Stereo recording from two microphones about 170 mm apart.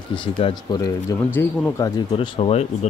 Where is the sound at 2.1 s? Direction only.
35° left (ahead or behind).